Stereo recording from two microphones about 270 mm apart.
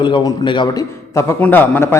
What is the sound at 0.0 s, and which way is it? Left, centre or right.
A man's voice, centre.